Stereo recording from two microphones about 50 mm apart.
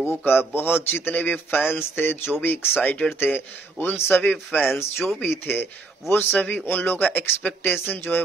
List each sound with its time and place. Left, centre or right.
0.2 s a man's voice: left
4.2 s speech: left
4.7 s a man's voice: left